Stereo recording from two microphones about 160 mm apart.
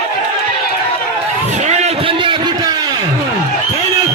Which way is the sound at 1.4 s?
45° right (ahead or behind).